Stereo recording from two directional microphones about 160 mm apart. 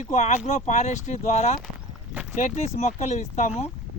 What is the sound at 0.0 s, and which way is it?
Speech, 45° left (ahead or behind).